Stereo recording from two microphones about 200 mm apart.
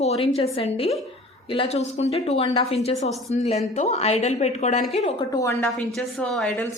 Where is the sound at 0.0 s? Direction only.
30° left (ahead or behind).